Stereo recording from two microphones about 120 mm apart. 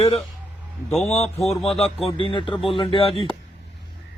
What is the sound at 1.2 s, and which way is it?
Speech, 60° left (ahead or behind).